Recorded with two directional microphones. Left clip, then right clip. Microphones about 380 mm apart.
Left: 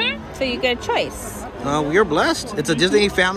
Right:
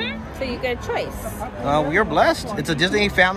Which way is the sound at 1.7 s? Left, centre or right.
Centre.